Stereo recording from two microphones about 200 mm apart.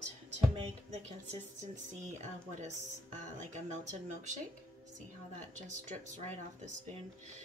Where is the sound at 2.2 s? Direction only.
35° right (ahead or behind).